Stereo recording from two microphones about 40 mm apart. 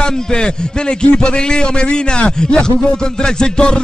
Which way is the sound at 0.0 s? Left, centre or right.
Left.